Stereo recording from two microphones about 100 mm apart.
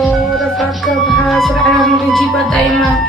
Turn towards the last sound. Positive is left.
turn(degrees=5)  # may be behind; listen again after turning